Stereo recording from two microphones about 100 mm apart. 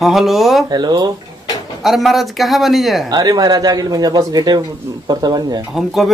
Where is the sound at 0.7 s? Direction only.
45° right (ahead or behind).